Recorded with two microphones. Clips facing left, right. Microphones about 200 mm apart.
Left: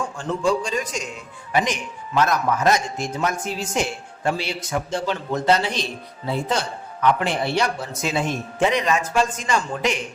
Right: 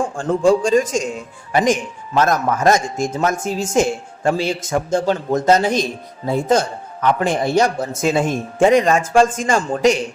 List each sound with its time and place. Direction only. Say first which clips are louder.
0.0 s a man's voice: right 7 dB; 50° right (ahead or behind)